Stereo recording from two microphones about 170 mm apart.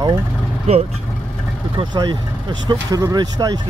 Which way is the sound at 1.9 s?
25° right (ahead or behind).